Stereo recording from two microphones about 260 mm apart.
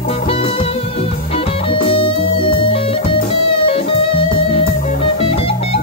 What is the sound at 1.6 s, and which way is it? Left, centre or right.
Music, centre.